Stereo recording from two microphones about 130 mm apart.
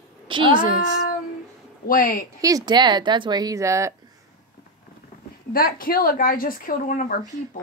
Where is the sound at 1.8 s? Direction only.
90° left.